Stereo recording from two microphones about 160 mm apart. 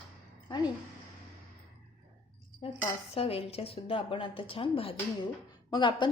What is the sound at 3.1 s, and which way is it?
A woman's voice, 40° left (ahead or behind).